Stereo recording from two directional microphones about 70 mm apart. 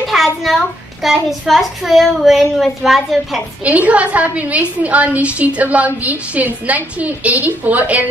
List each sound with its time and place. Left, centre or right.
0.0 s a sound: centre
1.0 s a child's voice: centre
3.6 s a woman's voice: centre